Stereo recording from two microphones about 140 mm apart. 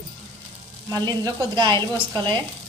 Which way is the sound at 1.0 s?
30° right (ahead or behind).